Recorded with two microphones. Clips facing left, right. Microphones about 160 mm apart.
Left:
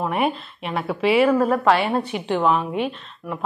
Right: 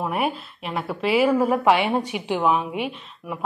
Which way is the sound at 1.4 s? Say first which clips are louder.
Left 1 dB; 10° right (ahead or behind).